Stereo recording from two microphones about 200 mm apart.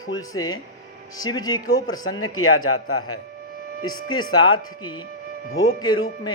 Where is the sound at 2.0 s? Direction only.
90° left.